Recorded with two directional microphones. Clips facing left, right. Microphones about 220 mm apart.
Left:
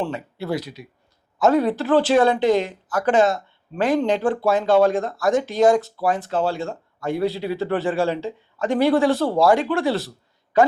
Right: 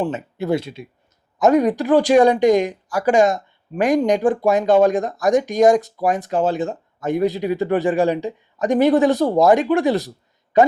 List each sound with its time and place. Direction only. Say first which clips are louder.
0.0 s speech: right 4 dB; 20° right (ahead or behind)
1.4 s speech: right 3 dB; 15° right (ahead or behind)